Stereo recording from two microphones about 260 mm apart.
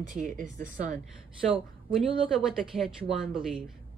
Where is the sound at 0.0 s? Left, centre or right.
Right.